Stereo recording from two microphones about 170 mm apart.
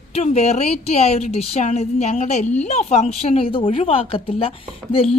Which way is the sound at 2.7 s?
40° left (ahead or behind).